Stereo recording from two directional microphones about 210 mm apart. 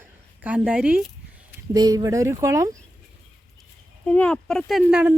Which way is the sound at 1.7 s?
20° right (ahead or behind).